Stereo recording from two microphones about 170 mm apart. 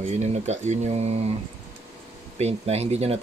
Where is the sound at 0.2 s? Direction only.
40° right (ahead or behind).